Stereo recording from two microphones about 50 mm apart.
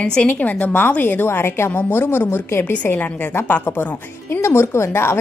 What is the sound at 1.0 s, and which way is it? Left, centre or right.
A woman's voice, left.